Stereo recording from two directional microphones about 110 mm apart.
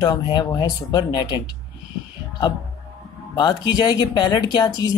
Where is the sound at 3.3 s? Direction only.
35° left (ahead or behind).